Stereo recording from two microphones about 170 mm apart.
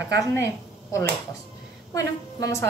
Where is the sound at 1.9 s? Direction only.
20° left (ahead or behind).